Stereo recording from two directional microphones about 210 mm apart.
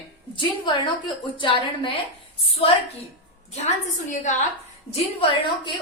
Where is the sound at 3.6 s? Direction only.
35° left (ahead or behind).